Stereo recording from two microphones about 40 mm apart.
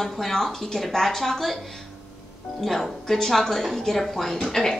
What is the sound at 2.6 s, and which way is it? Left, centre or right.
A woman's voice, centre.